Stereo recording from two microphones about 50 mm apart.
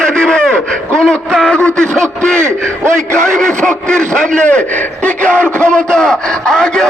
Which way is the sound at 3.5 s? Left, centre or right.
Centre.